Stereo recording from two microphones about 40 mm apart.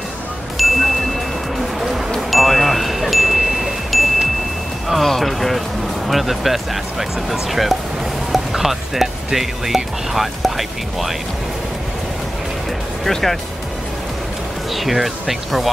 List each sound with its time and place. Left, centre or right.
0.6 s music: centre
2.1 s chime: centre
4.8 s music: centre
6.0 s speech: centre
13.0 s speech: centre
14.7 s speech: centre